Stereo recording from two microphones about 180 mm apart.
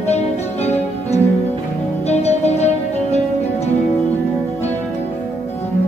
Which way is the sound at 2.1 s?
35° left (ahead or behind).